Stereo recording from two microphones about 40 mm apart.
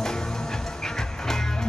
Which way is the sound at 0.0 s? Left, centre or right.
Centre.